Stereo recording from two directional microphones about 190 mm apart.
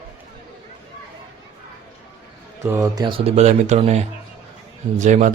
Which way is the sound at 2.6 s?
15° right (ahead or behind).